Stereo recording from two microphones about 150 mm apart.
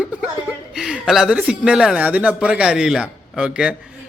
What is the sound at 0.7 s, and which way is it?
Speech, 5° right (ahead or behind).